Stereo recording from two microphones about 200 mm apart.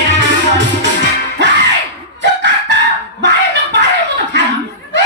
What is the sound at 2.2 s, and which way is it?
Chicken, 60° right (ahead or behind).